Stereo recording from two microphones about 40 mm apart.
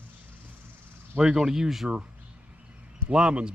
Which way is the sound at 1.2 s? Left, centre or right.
Centre.